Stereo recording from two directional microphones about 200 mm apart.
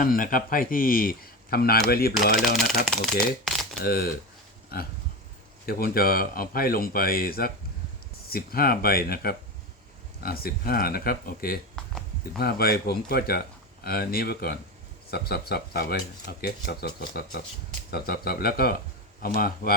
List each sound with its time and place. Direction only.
0.0 s speech: 45° left (ahead or behind)
2.8 s speech: centre (ahead or behind)
3.8 s speech: 50° left (ahead or behind)
5.6 s speech: 50° left (ahead or behind)
17.9 s speech: 50° left (ahead or behind)